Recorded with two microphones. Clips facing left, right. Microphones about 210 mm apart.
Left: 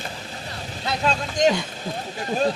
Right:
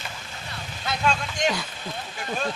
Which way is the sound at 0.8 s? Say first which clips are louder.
Left 2 dB; 35° left (ahead or behind).